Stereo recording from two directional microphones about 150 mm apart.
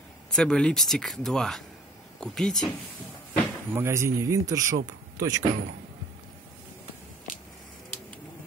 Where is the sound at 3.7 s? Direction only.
15° right (ahead or behind).